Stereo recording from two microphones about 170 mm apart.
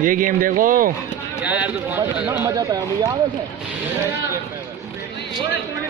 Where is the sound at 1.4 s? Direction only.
10° right (ahead or behind).